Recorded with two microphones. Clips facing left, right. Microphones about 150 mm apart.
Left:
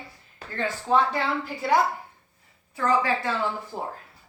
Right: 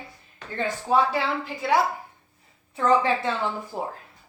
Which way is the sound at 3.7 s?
10° right (ahead or behind).